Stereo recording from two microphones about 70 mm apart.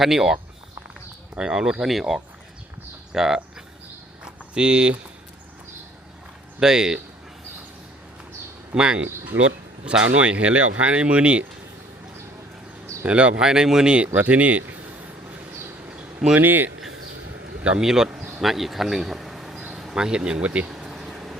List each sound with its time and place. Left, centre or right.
0.0 s speech: centre
1.4 s speech: centre
4.2 s a sound: centre
6.6 s speech: centre
8.7 s speech: centre
13.1 s speech: centre
15.9 s a sound: centre
16.4 s speech: right
17.6 s speech: centre
19.7 s bee: centre